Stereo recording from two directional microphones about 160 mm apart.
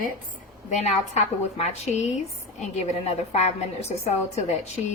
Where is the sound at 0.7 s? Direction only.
45° left (ahead or behind).